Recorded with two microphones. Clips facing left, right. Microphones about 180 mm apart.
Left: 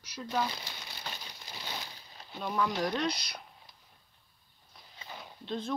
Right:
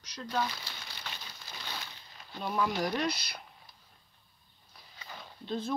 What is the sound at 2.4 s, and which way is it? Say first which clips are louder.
Speech: even; 5° right (ahead or behind).